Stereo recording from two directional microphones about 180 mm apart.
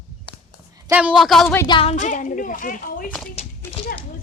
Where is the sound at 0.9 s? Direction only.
10° right (ahead or behind).